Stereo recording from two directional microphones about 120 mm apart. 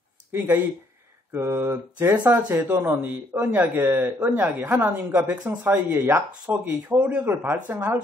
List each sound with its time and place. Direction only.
0.3 s speech: 15° right (ahead or behind)